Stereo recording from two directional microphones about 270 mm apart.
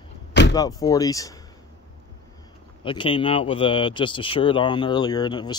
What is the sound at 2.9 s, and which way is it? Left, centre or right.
Speech, centre.